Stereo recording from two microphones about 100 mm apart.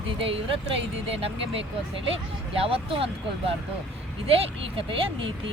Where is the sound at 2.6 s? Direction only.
70° right (ahead or behind).